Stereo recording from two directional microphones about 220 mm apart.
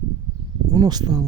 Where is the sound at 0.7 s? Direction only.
15° right (ahead or behind).